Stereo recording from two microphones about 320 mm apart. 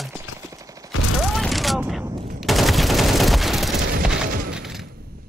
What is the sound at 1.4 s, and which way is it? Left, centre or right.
Fusillade, centre.